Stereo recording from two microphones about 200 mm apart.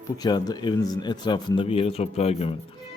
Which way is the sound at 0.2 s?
20° left (ahead or behind).